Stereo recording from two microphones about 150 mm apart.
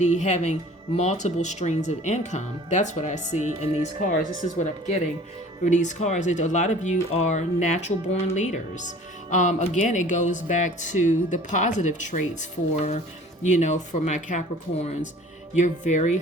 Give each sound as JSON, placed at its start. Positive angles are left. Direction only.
{"t": 0.0, "sound": "speech", "side_deg": 50}
{"t": 4.4, "sound": "speech", "side_deg": 40}
{"t": 5.6, "sound": "speech", "side_deg": 55}